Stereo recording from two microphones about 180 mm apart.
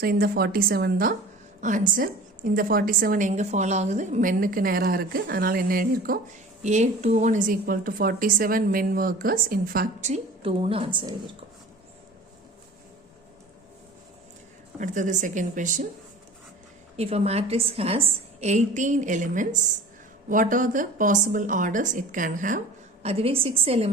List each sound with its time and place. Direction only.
0.0 s a woman's voice: 55° right (ahead or behind)
6.6 s a woman's voice: 40° right (ahead or behind)
10.1 s a woman's voice: 30° right (ahead or behind)
14.8 s a woman's voice: 45° right (ahead or behind)
17.0 s a woman's voice: 35° right (ahead or behind)
23.0 s a woman's voice: 35° right (ahead or behind)